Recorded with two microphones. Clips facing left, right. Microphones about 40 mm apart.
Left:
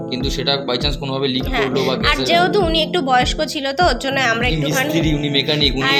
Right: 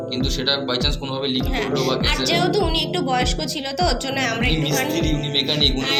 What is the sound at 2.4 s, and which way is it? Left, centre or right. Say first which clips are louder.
Speech: left 5 dB; left.